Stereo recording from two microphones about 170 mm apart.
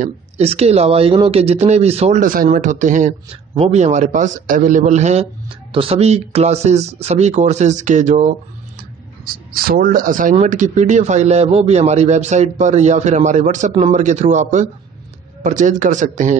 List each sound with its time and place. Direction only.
0.0 s speech: 35° right (ahead or behind)
5.7 s speech: 30° right (ahead or behind)
9.2 s speech: 60° right (ahead or behind)